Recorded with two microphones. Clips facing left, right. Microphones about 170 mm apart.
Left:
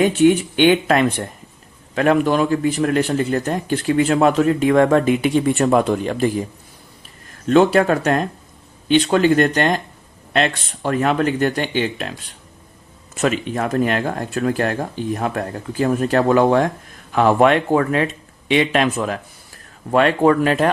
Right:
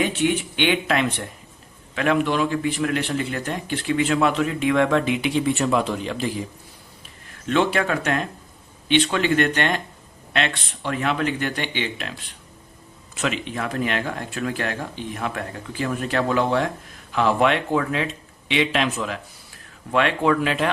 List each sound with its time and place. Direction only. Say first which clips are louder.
0.0 s a man's voice: left 8 dB; 45° left (ahead or behind)
7.4 s a man's voice: left 7 dB; 40° left (ahead or behind)
13.1 s a man's voice: left 6 dB; 45° left (ahead or behind)